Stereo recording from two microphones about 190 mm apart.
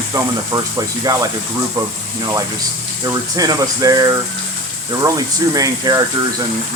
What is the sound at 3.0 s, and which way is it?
Speech, 20° right (ahead or behind).